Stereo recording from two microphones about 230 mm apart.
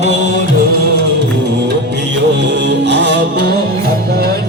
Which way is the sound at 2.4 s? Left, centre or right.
Right.